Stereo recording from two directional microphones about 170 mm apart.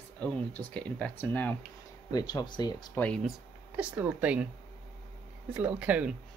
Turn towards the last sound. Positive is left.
turn(degrees=-5)  # may be behind; listen again after turning